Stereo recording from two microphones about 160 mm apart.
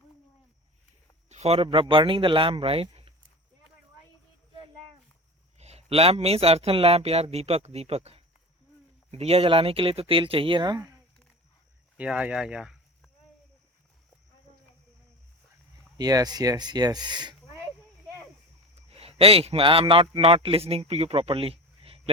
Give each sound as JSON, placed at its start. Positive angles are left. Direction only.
{"t": 1.3, "sound": "speech", "side_deg": -40}
{"t": 4.5, "sound": "a sound", "side_deg": -30}
{"t": 5.5, "sound": "speech", "side_deg": -40}
{"t": 11.9, "sound": "speech", "side_deg": -5}
{"t": 16.0, "sound": "speech", "side_deg": -25}
{"t": 18.9, "sound": "a man's voice", "side_deg": -40}